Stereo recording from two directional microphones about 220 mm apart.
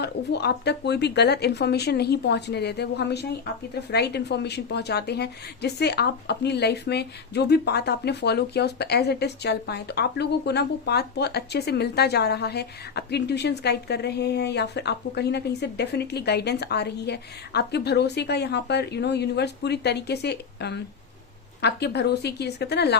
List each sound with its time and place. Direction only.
0.0 s a woman's voice: 50° left (ahead or behind)